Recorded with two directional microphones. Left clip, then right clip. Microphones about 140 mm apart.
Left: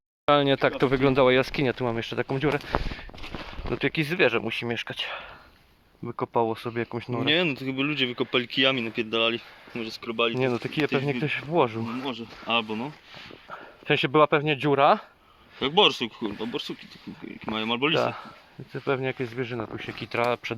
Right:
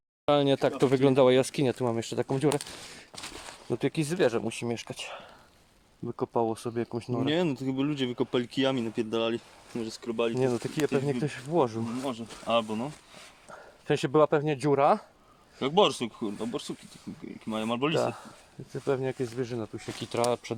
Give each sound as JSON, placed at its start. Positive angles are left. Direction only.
{"t": 0.3, "sound": "speech", "side_deg": -10}
{"t": 0.9, "sound": "speech", "side_deg": -25}
{"t": 3.8, "sound": "speech", "side_deg": -20}
{"t": 6.3, "sound": "speech", "side_deg": 0}
{"t": 7.3, "sound": "speech", "side_deg": -55}
{"t": 10.3, "sound": "speech", "side_deg": -5}
{"t": 12.0, "sound": "speech", "side_deg": -90}
{"t": 13.5, "sound": "speech", "side_deg": 0}
{"t": 15.5, "sound": "speech", "side_deg": -90}
{"t": 17.9, "sound": "speech", "side_deg": -5}
{"t": 19.7, "sound": "speech", "side_deg": -20}